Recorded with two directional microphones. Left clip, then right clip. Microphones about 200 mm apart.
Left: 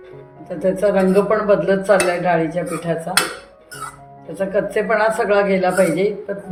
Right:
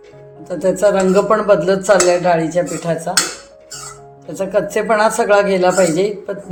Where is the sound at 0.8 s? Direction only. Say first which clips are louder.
Right 3 dB; 40° right (ahead or behind).